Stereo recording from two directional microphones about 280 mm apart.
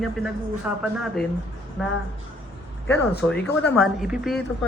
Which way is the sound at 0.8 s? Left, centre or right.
Centre.